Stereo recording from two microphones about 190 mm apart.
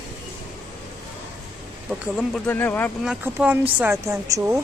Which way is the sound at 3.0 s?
5° right (ahead or behind).